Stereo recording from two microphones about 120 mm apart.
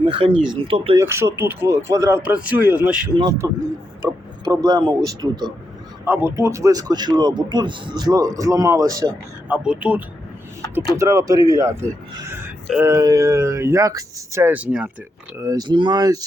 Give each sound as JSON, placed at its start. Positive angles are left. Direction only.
{"t": 0.1, "sound": "speech", "side_deg": -50}
{"t": 0.9, "sound": "a man's voice", "side_deg": -20}
{"t": 6.1, "sound": "speech", "side_deg": -20}
{"t": 9.5, "sound": "speech", "side_deg": -10}
{"t": 10.9, "sound": "a man's voice", "side_deg": -25}
{"t": 14.4, "sound": "speech", "side_deg": -10}
{"t": 15.4, "sound": "speech", "side_deg": -30}